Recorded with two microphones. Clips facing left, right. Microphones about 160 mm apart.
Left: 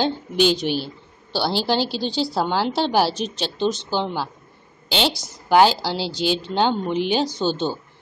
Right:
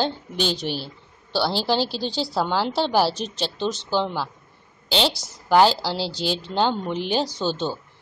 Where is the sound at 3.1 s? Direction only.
30° right (ahead or behind).